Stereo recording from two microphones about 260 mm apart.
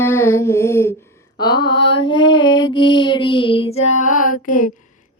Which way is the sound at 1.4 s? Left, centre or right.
Centre.